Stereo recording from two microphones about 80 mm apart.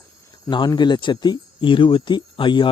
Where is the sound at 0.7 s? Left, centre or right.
Left.